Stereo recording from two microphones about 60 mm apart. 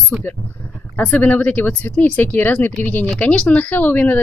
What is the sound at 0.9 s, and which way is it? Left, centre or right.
A woman's voice, left.